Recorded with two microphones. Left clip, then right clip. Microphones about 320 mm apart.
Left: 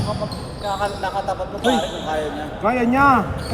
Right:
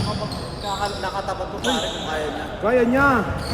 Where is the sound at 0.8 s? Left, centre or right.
Centre.